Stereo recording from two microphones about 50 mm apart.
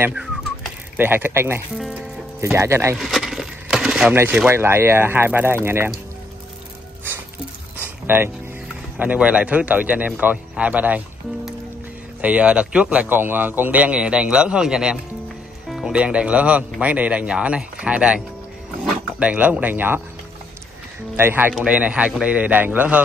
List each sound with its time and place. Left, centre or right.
0.9 s speech: right
1.7 s a man's voice: centre
2.5 s speech: right
3.0 s coin: centre
4.1 s speech: right
8.1 s a man's voice: right
8.9 s a man's voice: right
12.2 s speech: right
13.1 s a man's voice: right
13.7 s a man's voice: right
19.7 s a man's voice: right
21.2 s speech: right
21.6 s speech: right